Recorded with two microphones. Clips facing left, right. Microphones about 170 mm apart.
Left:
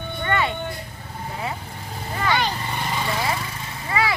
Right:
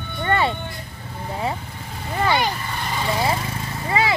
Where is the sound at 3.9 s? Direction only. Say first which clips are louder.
Right 2 dB; 25° right (ahead or behind).